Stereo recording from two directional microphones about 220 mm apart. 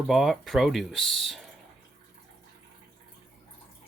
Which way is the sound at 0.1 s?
Centre (ahead or behind).